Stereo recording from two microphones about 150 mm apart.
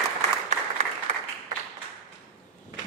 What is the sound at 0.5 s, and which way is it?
Applause, 50° right (ahead or behind).